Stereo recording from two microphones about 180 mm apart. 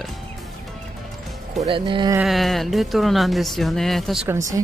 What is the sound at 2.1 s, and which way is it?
Speech, centre (ahead or behind).